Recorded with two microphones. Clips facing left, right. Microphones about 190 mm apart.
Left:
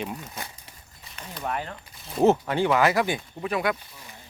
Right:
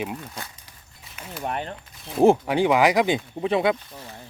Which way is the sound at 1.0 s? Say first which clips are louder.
Right 2 dB; 5° right (ahead or behind).